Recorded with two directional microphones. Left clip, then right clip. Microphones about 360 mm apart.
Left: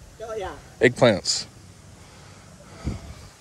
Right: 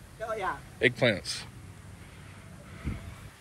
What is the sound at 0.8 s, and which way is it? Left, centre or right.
Speech, left.